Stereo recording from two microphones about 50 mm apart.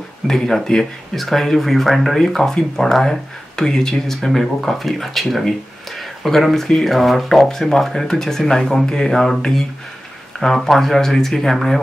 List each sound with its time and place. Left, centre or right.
0.3 s speech: centre